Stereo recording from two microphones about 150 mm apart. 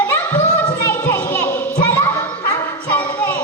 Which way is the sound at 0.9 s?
10° left (ahead or behind).